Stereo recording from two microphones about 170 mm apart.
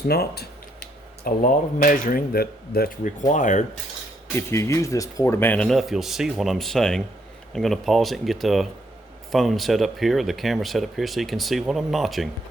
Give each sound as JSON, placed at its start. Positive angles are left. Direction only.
{"t": 0.1, "sound": "speech", "side_deg": 70}
{"t": 4.4, "sound": "speech", "side_deg": 15}